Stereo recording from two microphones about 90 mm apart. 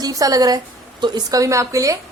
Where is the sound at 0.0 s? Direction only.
40° right (ahead or behind).